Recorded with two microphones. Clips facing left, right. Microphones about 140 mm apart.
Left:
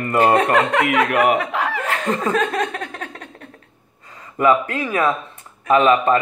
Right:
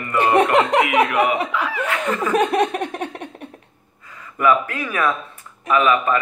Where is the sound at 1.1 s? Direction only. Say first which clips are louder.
Left 2 dB; 50° left (ahead or behind).